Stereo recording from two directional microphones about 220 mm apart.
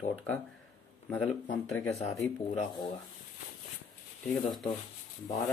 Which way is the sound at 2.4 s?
20° left (ahead or behind).